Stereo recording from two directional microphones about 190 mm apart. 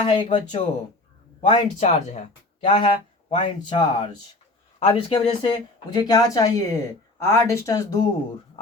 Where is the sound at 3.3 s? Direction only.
40° left (ahead or behind).